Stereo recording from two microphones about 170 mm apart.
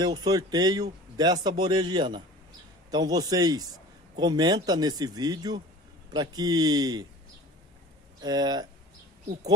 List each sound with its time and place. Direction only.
0.0 s speech: 25° right (ahead or behind)
8.2 s speech: 25° right (ahead or behind)